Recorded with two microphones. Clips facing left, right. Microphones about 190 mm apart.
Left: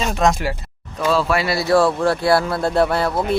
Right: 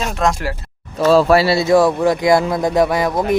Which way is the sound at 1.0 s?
40° right (ahead or behind).